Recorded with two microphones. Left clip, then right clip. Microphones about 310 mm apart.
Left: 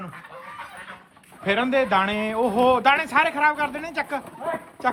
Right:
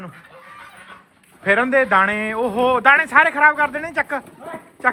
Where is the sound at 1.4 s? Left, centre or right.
Centre.